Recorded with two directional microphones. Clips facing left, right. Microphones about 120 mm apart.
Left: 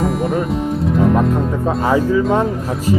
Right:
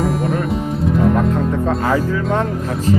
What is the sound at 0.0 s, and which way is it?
Speech, centre (ahead or behind).